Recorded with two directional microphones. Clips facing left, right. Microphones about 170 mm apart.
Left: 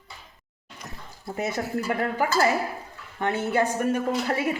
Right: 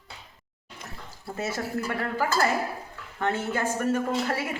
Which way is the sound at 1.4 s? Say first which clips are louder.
Left 2 dB; 15° left (ahead or behind).